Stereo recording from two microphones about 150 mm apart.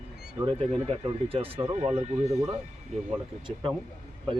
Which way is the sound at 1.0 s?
40° right (ahead or behind).